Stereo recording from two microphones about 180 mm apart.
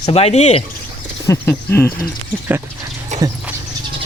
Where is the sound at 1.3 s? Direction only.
15° left (ahead or behind).